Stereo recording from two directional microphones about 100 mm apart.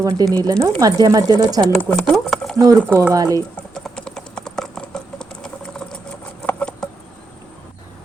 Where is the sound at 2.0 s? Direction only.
5° left (ahead or behind).